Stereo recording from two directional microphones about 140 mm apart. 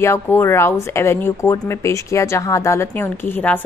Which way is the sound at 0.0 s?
20° left (ahead or behind).